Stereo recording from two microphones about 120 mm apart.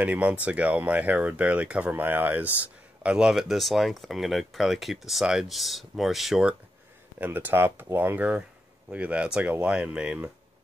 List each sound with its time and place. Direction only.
0.0 s speech: 10° right (ahead or behind)
7.2 s speech: 15° right (ahead or behind)